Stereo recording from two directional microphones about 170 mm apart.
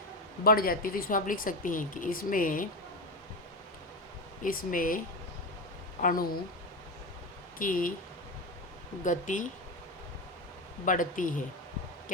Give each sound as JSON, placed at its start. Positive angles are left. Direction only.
{"t": 0.4, "sound": "speech", "side_deg": 60}
{"t": 4.4, "sound": "speech", "side_deg": 55}
{"t": 6.0, "sound": "speech", "side_deg": 55}
{"t": 7.6, "sound": "speech", "side_deg": 55}
{"t": 9.0, "sound": "speech", "side_deg": 50}
{"t": 10.8, "sound": "speech", "side_deg": 50}